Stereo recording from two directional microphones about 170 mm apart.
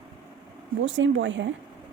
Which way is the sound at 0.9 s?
90° right.